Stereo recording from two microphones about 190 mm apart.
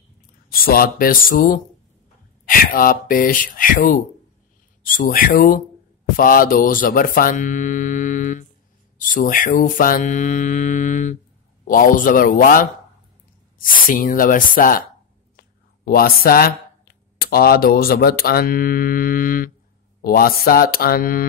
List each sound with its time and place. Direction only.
0.5 s speech: 50° left (ahead or behind)
8.9 s mantra: 45° left (ahead or behind)
11.6 s speech: 45° left (ahead or behind)